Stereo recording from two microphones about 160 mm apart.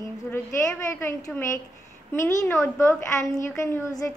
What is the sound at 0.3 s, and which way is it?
A woman's voice, 15° left (ahead or behind).